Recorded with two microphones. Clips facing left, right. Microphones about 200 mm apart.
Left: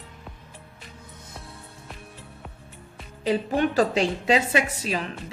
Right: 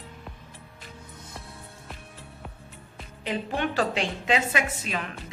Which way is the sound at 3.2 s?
40° left (ahead or behind).